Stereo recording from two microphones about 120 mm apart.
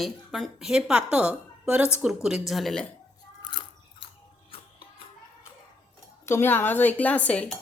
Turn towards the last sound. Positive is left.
turn(degrees=10)  # may be behind; listen again after turning